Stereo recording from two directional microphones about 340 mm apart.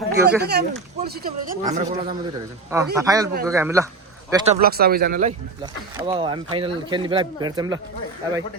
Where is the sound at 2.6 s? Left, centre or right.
Centre.